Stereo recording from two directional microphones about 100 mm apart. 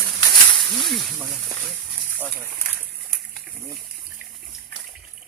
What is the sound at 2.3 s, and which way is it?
Speech, 20° right (ahead or behind).